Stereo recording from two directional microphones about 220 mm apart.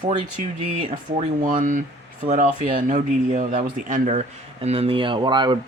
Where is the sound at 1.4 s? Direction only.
35° right (ahead or behind).